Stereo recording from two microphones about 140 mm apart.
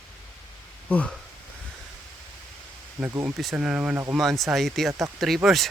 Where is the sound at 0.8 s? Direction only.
10° left (ahead or behind).